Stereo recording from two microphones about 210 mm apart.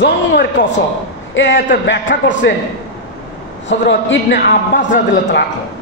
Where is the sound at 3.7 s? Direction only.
60° left (ahead or behind).